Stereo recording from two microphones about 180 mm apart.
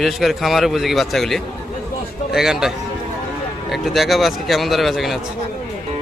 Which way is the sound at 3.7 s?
Centre (ahead or behind).